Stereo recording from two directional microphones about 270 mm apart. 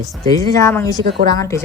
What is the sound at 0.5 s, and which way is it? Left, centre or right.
Speech, centre.